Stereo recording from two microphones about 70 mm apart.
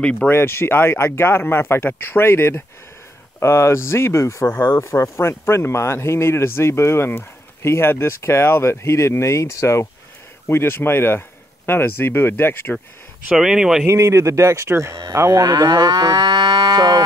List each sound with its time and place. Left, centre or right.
0.0 s speech: centre
0.3 s speech: left
13.3 s speech: centre
13.8 s speech: right
15.1 s moo: right
15.4 s livestock: right